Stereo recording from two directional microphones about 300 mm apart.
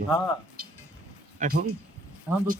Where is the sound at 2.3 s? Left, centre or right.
Centre.